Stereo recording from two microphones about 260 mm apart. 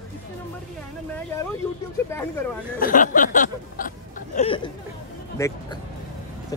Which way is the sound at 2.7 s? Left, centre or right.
Left.